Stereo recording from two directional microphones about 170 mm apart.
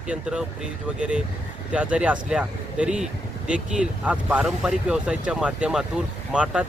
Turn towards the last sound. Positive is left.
turn(degrees=-5)  # may be behind; listen again after turning